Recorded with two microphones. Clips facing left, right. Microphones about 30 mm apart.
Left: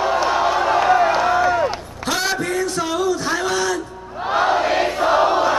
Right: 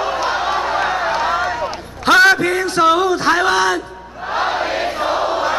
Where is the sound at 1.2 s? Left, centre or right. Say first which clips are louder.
Left 1 dB; right.